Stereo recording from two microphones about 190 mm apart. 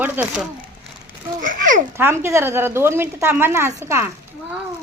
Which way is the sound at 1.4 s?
45° right (ahead or behind).